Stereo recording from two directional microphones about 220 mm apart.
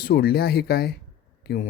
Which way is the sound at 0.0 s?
45° left (ahead or behind).